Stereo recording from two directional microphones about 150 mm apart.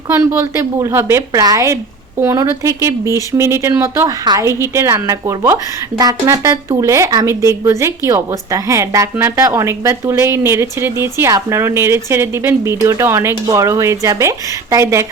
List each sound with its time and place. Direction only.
0.1 s speech: 15° right (ahead or behind)